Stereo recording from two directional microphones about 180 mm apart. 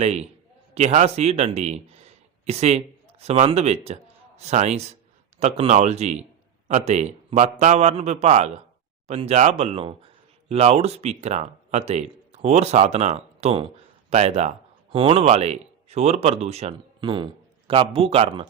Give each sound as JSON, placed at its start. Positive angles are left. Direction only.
{"t": 0.0, "sound": "speech", "side_deg": -35}